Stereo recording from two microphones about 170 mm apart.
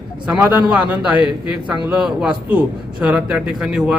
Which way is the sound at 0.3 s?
10° right (ahead or behind).